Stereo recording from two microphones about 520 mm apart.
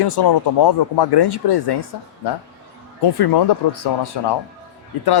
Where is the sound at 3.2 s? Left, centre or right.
Left.